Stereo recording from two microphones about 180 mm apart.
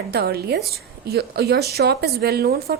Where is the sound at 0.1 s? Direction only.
60° right (ahead or behind).